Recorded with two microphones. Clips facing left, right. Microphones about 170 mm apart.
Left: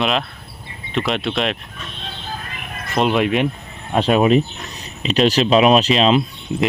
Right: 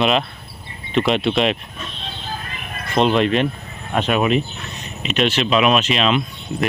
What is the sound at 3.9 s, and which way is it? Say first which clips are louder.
Speech: left 4 dB; 30° left (ahead or behind).